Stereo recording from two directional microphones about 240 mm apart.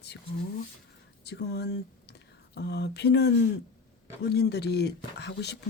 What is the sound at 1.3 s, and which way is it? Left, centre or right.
Speech, left.